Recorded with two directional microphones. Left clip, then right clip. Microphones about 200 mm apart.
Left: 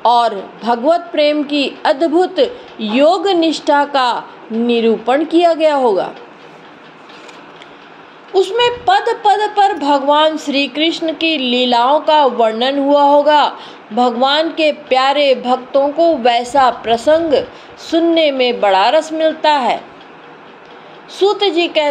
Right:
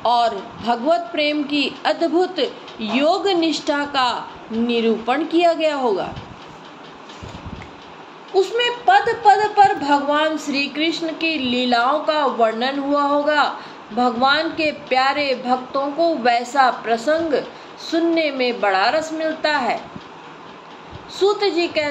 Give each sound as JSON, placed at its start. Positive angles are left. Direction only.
{"t": 0.0, "sound": "a woman's voice", "side_deg": 30}
{"t": 8.3, "sound": "a woman's voice", "side_deg": 40}
{"t": 21.2, "sound": "a woman's voice", "side_deg": 35}